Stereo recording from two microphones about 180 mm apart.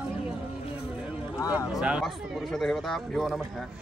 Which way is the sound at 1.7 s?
5° right (ahead or behind).